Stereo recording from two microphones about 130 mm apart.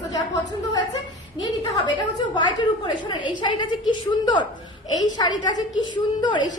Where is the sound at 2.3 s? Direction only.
35° left (ahead or behind).